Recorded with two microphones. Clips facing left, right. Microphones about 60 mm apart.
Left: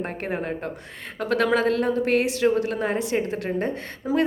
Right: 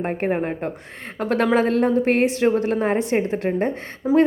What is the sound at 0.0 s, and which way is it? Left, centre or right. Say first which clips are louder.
A woman's voice: right 6 dB; right.